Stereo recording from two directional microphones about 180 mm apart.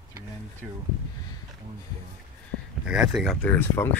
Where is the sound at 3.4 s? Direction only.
10° left (ahead or behind).